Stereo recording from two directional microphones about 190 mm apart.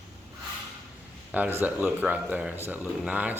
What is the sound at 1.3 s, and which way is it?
Speech, 10° right (ahead or behind).